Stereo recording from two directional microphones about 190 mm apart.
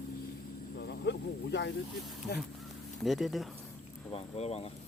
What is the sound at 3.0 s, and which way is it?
Speech, centre (ahead or behind).